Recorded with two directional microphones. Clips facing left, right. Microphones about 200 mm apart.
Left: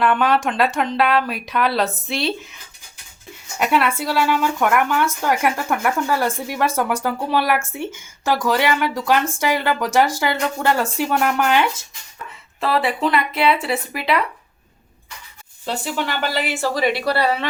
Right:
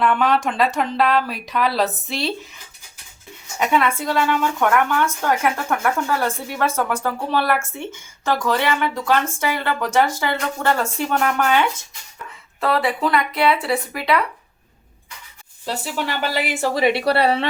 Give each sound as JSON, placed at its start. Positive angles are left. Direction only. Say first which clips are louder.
{"t": 0.0, "sound": "speech", "louder": "left 1 dB", "side_deg": 0}
{"t": 3.6, "sound": "speech", "louder": "even", "side_deg": 5}
{"t": 15.6, "sound": "speech", "louder": "left 1 dB", "side_deg": -5}